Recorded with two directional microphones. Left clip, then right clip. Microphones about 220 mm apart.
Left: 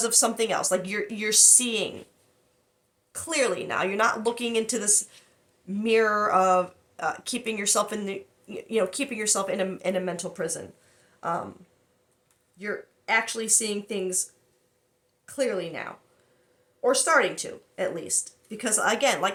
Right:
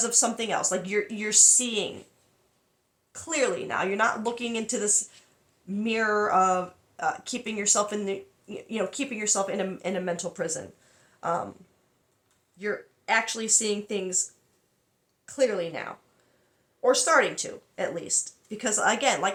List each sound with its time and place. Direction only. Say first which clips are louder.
0.0 s speech: left 2 dB; 15° left (ahead or behind)
3.1 s speech: left 1 dB; 15° left (ahead or behind)
12.5 s speech: right 2 dB; 5° left (ahead or behind)
15.3 s speech: right 2 dB; 5° left (ahead or behind)